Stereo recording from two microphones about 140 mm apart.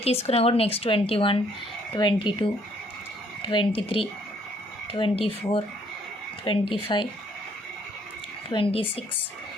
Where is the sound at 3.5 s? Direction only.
35° left (ahead or behind).